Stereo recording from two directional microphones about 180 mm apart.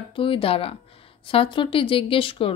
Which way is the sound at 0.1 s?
30° left (ahead or behind).